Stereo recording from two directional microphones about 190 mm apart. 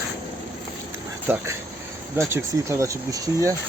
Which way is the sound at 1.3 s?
10° right (ahead or behind).